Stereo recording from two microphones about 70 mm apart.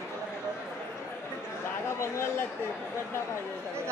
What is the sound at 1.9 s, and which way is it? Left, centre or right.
Speech, left.